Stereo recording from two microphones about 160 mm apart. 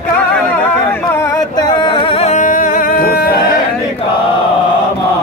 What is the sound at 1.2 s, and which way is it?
Music, 20° left (ahead or behind).